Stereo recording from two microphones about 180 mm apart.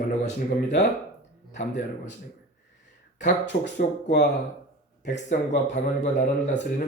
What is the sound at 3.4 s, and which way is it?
Speech, 70° left (ahead or behind).